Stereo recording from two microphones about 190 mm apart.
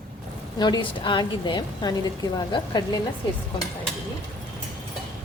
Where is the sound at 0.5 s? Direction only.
20° left (ahead or behind).